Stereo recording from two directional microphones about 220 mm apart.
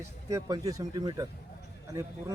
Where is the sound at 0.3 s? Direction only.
15° right (ahead or behind).